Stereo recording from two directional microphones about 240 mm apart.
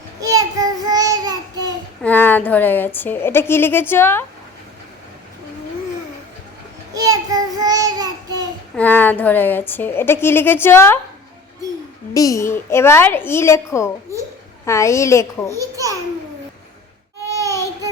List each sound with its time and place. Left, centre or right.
0.2 s child singing: centre
2.0 s a woman's voice: centre
6.9 s child singing: centre
8.7 s a woman's voice: centre
12.1 s a woman's voice: centre
15.5 s a child's voice: centre
17.4 s a sound: centre